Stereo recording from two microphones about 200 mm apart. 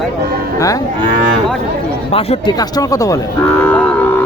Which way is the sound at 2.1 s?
25° left (ahead or behind).